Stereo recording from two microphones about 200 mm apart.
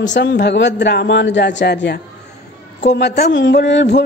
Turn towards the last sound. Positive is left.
turn(degrees=60)  # may be behind; listen again after turning